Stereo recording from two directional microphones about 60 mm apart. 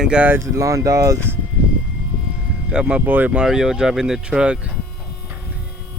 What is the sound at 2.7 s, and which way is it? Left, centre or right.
Speech, centre.